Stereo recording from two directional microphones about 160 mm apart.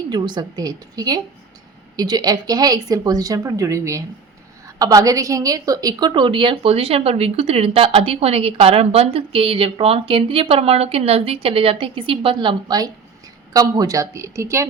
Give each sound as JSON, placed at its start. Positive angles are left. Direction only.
{"t": 0.1, "sound": "a woman's voice", "side_deg": -25}